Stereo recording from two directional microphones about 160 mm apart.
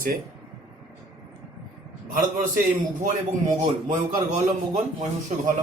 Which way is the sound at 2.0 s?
55° right (ahead or behind).